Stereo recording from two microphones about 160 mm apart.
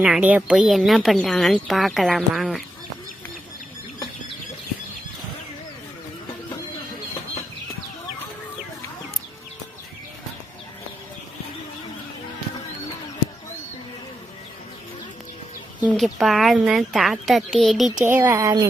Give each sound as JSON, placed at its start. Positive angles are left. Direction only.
{"t": 0.0, "sound": "a woman's voice", "side_deg": -10}
{"t": 15.8, "sound": "a woman's voice", "side_deg": 0}
{"t": 18.0, "sound": "speech", "side_deg": -15}